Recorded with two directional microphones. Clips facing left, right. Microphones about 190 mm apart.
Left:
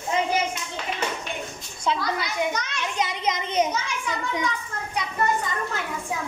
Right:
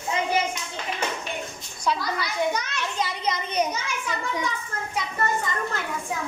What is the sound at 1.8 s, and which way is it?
A child's voice, 20° left (ahead or behind).